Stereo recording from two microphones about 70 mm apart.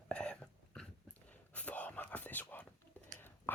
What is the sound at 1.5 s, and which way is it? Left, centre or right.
Whispering, left.